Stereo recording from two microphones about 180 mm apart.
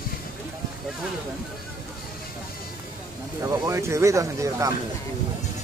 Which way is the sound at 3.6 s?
15° right (ahead or behind).